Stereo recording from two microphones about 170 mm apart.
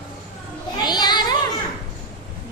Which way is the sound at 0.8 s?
25° left (ahead or behind).